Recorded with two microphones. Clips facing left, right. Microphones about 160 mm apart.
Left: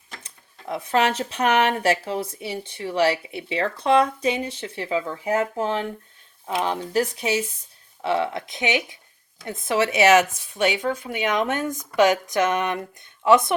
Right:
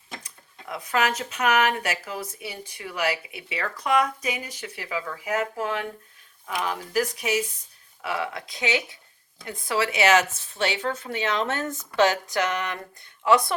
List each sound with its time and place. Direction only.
0.2 s speech: 25° left (ahead or behind)